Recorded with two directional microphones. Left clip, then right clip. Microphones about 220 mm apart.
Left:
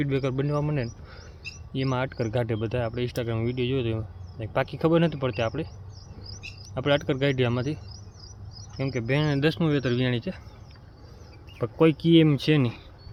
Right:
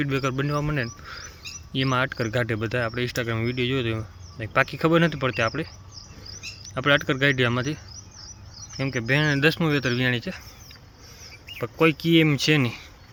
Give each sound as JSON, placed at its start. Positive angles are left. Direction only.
{"t": 0.0, "sound": "speech", "side_deg": 5}
{"t": 1.0, "sound": "a sound", "side_deg": 0}
{"t": 1.7, "sound": "speech", "side_deg": 0}
{"t": 6.7, "sound": "speech", "side_deg": 0}
{"t": 8.8, "sound": "speech", "side_deg": 0}
{"t": 11.6, "sound": "speech", "side_deg": 10}